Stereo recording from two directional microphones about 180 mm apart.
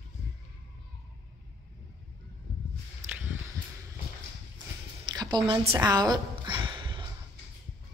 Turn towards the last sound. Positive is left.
turn(degrees=-25)  # may be behind; listen again after turning